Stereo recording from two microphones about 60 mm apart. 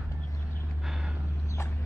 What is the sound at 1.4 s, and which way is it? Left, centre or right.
Vehicle, left.